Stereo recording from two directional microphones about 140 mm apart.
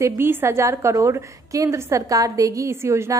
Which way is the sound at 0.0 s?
15° right (ahead or behind).